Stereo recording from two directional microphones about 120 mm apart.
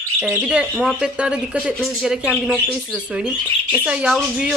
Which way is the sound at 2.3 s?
10° left (ahead or behind).